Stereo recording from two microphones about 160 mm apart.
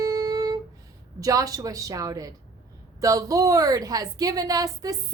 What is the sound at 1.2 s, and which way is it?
A woman's voice, 20° right (ahead or behind).